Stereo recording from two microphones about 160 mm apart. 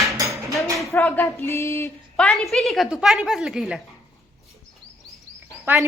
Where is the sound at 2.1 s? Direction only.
5° left (ahead or behind).